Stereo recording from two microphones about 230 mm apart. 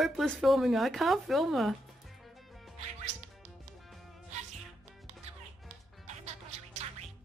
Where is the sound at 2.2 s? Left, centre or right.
Centre.